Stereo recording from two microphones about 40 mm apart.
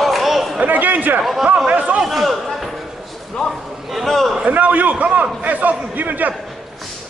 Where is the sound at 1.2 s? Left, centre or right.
Centre.